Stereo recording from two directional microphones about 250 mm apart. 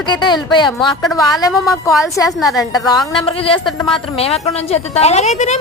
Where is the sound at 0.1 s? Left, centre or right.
Centre.